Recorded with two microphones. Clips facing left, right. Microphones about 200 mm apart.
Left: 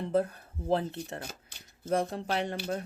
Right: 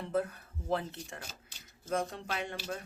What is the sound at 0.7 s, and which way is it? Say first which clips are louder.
Speech: left 5 dB; 35° left (ahead or behind).